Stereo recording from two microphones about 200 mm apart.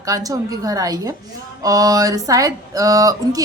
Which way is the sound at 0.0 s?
15° right (ahead or behind).